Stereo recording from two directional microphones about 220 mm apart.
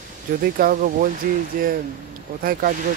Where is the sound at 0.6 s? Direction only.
40° right (ahead or behind).